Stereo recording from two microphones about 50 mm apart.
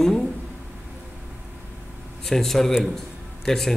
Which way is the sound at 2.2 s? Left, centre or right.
Centre.